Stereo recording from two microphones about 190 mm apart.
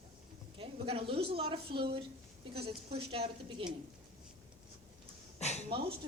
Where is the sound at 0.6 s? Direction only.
30° right (ahead or behind).